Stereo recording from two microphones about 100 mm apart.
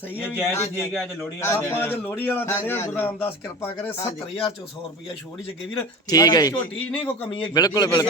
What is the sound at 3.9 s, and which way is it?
Speech, 70° left (ahead or behind).